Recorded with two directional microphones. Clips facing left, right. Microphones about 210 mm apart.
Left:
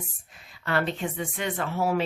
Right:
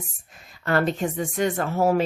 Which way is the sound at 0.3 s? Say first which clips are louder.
Right 6 dB; 45° right (ahead or behind).